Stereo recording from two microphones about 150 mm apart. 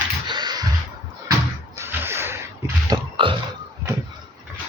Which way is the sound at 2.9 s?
35° right (ahead or behind).